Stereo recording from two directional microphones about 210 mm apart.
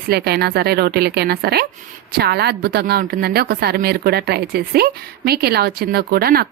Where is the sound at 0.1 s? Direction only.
50° right (ahead or behind).